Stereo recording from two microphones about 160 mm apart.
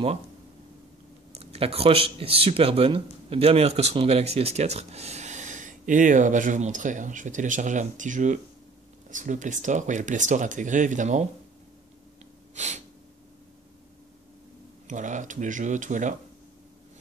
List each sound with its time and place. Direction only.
1.3 s speech: 40° right (ahead or behind)
12.5 s sneeze: 45° right (ahead or behind)
14.9 s speech: 50° right (ahead or behind)